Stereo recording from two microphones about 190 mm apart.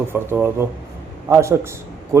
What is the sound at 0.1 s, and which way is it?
A man's voice, 10° right (ahead or behind).